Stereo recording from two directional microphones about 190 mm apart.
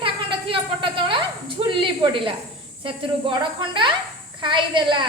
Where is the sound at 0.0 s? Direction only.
25° right (ahead or behind).